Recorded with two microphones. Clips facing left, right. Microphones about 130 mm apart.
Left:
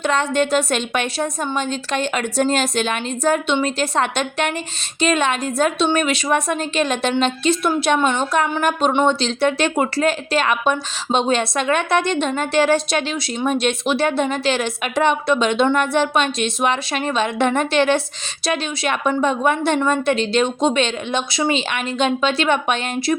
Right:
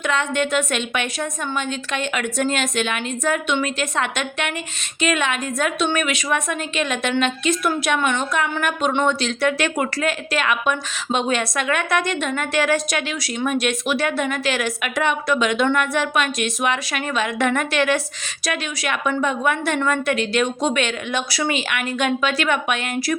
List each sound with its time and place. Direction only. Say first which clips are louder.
0.0 s a woman's voice: left 3 dB; 35° left (ahead or behind)